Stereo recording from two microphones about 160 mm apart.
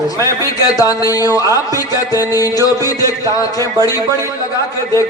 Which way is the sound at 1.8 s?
20° left (ahead or behind).